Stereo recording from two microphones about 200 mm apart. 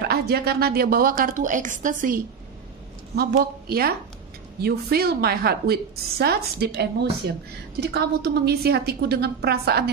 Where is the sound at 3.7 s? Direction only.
50° right (ahead or behind).